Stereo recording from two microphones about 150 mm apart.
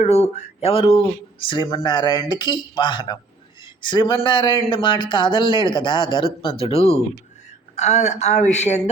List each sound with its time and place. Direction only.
0.0 s speech: 45° left (ahead or behind)